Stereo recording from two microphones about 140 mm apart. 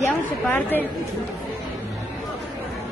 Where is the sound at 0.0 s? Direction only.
15° left (ahead or behind).